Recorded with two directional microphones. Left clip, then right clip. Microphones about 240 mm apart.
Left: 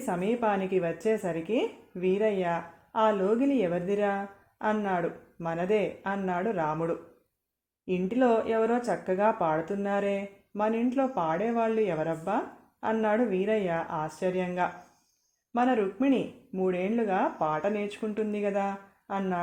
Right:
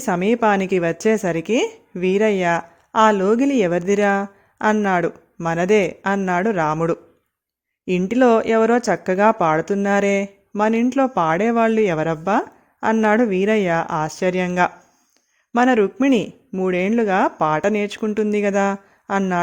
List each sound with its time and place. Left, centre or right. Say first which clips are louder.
0.0 s speech: right 10 dB; right